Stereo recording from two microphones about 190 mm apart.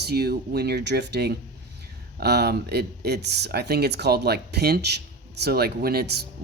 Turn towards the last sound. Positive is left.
turn(degrees=-55)  # may be behind; listen again after turning